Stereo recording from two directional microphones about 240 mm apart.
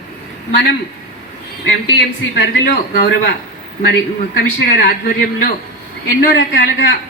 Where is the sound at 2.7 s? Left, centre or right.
Left.